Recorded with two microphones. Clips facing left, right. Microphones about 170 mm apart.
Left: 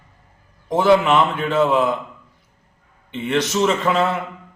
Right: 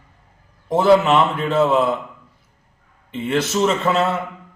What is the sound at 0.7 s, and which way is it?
Speech, 30° right (ahead or behind).